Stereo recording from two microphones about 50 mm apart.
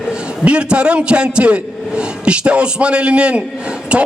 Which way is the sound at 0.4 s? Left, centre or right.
Right.